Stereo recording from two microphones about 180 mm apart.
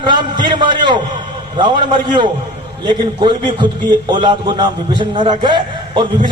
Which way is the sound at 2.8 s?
25° right (ahead or behind).